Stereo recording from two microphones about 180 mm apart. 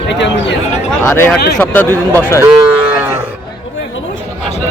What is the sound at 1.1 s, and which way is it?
Speech, 10° left (ahead or behind).